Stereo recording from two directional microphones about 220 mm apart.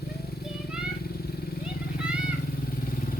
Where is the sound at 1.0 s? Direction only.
45° left (ahead or behind).